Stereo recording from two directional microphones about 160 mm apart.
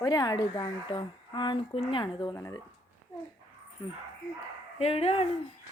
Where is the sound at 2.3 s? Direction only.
20° left (ahead or behind).